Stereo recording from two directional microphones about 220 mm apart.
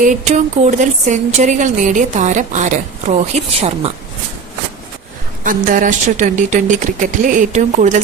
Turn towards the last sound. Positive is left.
turn(degrees=-35)  # may be behind; listen again after turning